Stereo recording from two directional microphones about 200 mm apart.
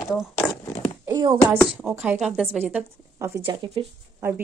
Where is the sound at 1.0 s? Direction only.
20° right (ahead or behind).